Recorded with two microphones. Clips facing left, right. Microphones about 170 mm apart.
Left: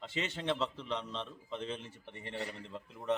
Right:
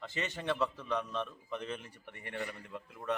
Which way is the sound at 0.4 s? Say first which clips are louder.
Right 2 dB; 20° left (ahead or behind).